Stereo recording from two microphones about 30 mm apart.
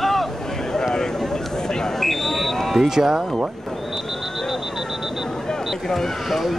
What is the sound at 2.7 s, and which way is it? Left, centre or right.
Speech, centre.